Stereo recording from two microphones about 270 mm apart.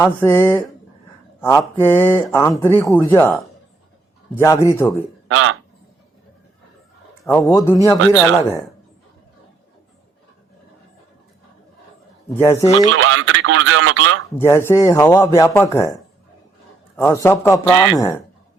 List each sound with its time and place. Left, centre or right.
0.0 s speech: centre
5.3 s speech: right
7.3 s speech: centre
12.4 s speech: centre
12.9 s speech: right
14.3 s speech: centre
17.0 s speech: centre